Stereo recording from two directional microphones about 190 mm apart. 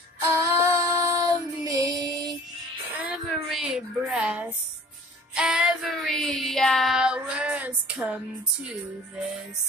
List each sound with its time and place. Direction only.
0.4 s child singing: 15° right (ahead or behind)
3.0 s a sound: 5° right (ahead or behind)
5.3 s child singing: 5° right (ahead or behind)
8.6 s music: 5° right (ahead or behind)